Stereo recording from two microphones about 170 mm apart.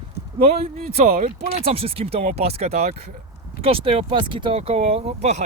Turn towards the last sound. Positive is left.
turn(degrees=-40)  # may be behind; listen again after turning